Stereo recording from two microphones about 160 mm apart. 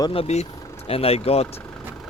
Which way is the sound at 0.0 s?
35° left (ahead or behind).